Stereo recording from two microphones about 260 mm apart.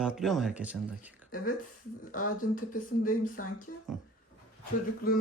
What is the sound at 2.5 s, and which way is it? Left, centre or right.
Speech, left.